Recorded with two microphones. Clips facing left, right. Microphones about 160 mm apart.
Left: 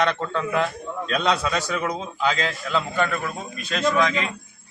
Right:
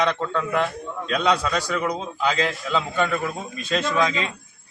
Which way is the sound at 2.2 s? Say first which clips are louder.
Right 1 dB; 15° right (ahead or behind).